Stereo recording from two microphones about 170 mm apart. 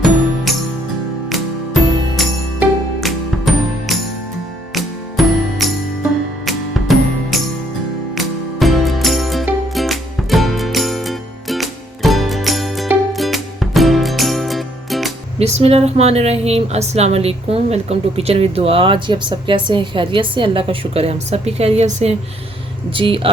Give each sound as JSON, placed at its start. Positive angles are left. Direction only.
{"t": 0.5, "sound": "music", "side_deg": 0}
{"t": 15.4, "sound": "speech", "side_deg": -40}
{"t": 23.0, "sound": "speech", "side_deg": -30}